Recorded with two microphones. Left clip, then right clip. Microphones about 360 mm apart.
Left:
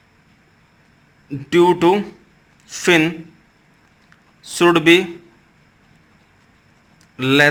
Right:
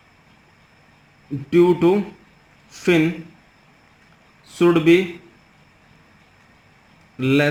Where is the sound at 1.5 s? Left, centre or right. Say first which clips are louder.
Left 2 dB; left.